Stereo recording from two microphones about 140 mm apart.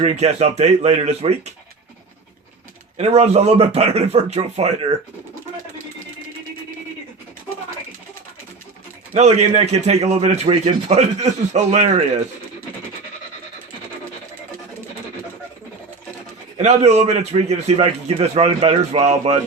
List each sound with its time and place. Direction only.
0.0 s a man's voice: 45° right (ahead or behind)
3.0 s a man's voice: 50° right (ahead or behind)
9.1 s a man's voice: 50° right (ahead or behind)
16.6 s a man's voice: 50° right (ahead or behind)